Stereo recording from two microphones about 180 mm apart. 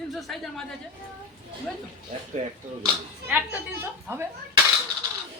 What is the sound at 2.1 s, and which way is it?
Speech, 40° right (ahead or behind).